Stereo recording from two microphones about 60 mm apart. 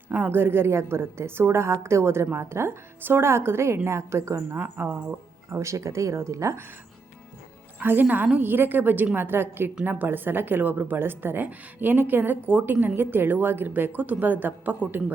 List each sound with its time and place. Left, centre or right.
0.1 s a woman's voice: right
4.5 s a woman's voice: right
5.5 s speech: right
7.8 s a woman's voice: right